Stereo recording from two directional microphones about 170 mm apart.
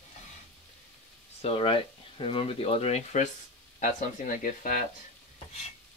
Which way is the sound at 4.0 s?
55° left (ahead or behind).